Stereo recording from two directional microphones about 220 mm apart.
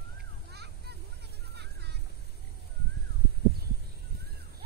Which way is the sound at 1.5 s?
50° right (ahead or behind).